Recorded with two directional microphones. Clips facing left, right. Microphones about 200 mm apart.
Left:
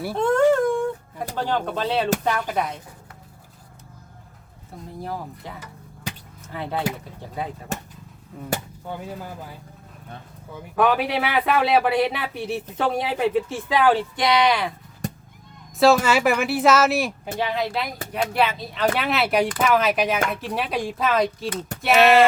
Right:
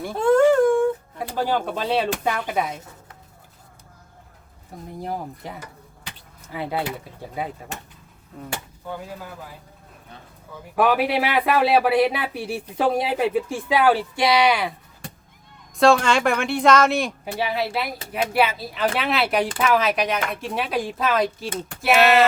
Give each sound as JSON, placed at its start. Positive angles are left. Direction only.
{"t": 0.0, "sound": "a sound", "side_deg": 5}
{"t": 1.4, "sound": "speech", "side_deg": -5}
{"t": 4.9, "sound": "speech", "side_deg": -15}
{"t": 10.8, "sound": "speech", "side_deg": -5}
{"t": 15.8, "sound": "speech", "side_deg": 5}
{"t": 17.4, "sound": "speech", "side_deg": -10}